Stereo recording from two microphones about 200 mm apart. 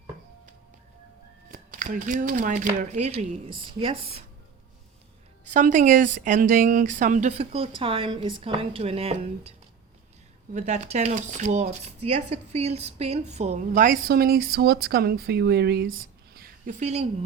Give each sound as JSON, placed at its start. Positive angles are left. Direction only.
{"t": 1.5, "sound": "speech", "side_deg": -45}
{"t": 5.5, "sound": "speech", "side_deg": -40}
{"t": 16.8, "sound": "speech", "side_deg": -35}